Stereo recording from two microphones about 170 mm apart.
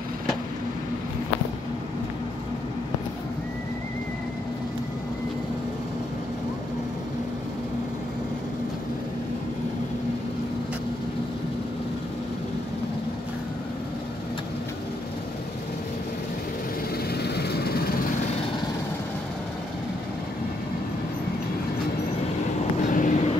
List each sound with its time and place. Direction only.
17.1 s vehicle: 70° left (ahead or behind)
22.8 s vehicle: 50° left (ahead or behind)